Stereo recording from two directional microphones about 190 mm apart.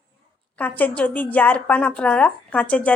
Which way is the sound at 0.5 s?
10° left (ahead or behind).